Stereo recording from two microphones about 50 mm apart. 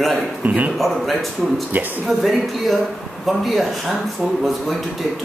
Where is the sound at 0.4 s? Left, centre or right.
Right.